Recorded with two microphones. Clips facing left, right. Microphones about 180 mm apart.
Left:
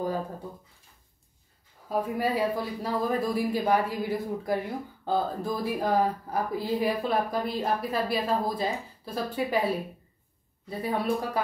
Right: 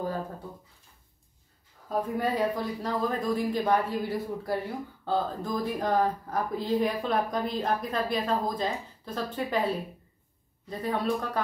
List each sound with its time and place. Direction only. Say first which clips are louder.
1.9 s speech: left 1 dB; 10° left (ahead or behind)